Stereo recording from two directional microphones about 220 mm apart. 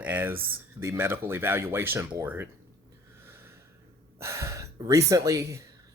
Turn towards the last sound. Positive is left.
turn(degrees=-15)  # may be behind; listen again after turning